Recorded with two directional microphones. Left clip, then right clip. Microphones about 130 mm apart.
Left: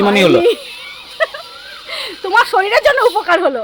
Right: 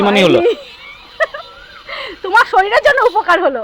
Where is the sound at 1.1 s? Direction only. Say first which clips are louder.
Right 1 dB; 5° left (ahead or behind).